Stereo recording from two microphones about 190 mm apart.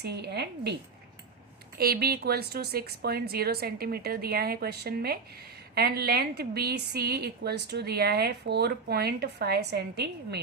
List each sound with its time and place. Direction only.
0.0 s a woman's voice: 60° right (ahead or behind)
1.8 s a woman's voice: 55° right (ahead or behind)